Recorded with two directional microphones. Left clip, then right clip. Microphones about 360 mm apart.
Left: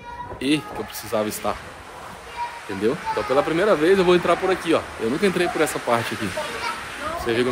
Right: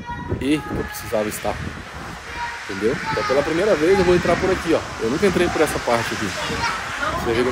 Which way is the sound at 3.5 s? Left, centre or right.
Centre.